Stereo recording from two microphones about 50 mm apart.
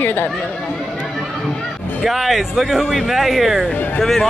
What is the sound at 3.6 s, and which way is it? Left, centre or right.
Speech, left.